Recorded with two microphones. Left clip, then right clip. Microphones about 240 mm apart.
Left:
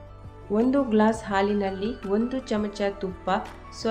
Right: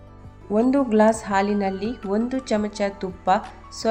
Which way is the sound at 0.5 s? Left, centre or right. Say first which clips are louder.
Right 4 dB; centre.